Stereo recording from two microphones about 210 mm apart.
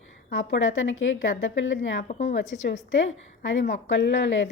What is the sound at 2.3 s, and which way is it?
A woman's voice, 60° left (ahead or behind).